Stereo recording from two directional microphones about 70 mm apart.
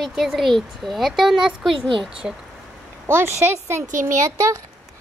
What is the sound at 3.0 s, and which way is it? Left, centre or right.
Speech, right.